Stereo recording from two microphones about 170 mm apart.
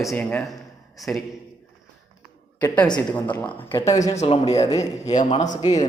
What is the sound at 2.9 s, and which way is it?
Speech, 10° left (ahead or behind).